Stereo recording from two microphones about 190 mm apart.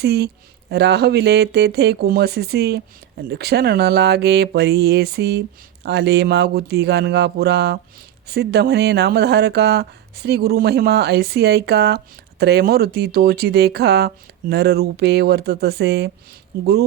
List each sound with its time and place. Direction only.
0.0 s speech: 60° right (ahead or behind)